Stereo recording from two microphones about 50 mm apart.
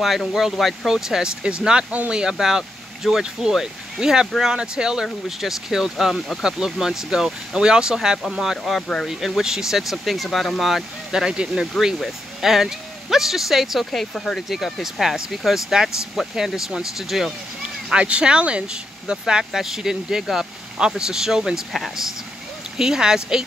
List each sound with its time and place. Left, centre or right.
0.0 s speech: centre
5.0 s speech: centre
17.9 s speech: right
21.7 s speech: centre
22.8 s speech: centre